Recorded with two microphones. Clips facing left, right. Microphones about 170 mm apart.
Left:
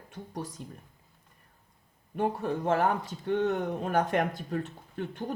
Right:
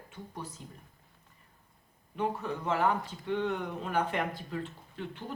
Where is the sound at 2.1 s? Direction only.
50° left (ahead or behind).